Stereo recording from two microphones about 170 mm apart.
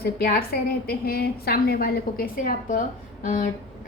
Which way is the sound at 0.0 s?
60° left (ahead or behind).